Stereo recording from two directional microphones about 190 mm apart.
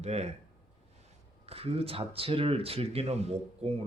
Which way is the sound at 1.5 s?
30° right (ahead or behind).